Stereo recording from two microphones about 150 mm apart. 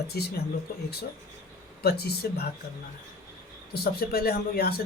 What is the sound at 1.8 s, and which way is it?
Speech, 90° left.